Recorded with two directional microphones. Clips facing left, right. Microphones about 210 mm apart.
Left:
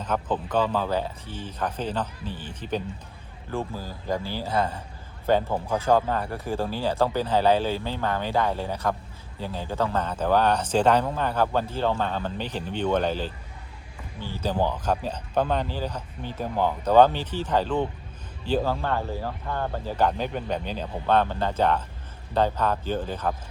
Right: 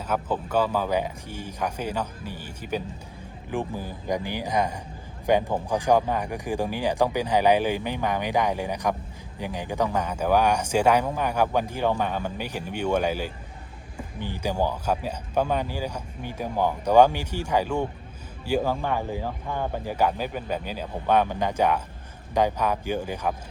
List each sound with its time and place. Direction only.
0.0 s speech: 10° right (ahead or behind)